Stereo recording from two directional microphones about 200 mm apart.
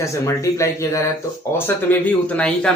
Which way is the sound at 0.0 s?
15° left (ahead or behind).